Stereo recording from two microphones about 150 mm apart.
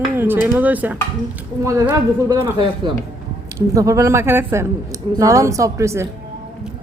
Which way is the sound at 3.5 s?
20° right (ahead or behind).